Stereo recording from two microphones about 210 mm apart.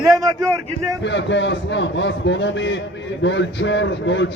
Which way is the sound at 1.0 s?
60° left (ahead or behind).